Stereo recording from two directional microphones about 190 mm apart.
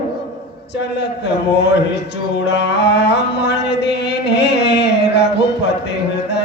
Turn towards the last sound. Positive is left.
turn(degrees=65)  # may be behind; listen again after turning